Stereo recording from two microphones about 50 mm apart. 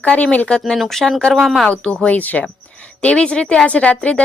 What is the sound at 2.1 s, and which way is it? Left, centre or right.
Speech, left.